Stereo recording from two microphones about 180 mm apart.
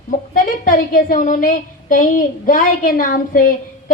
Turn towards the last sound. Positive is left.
turn(degrees=50)  # may be behind; listen again after turning